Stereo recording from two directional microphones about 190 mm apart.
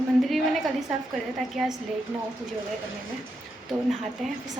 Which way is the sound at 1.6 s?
Centre (ahead or behind).